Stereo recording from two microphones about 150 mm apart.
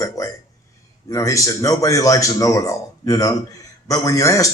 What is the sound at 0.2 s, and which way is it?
A man's voice, 25° left (ahead or behind).